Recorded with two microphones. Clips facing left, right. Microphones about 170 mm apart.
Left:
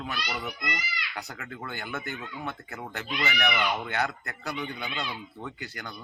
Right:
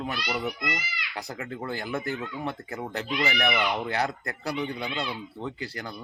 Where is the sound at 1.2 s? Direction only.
35° right (ahead or behind).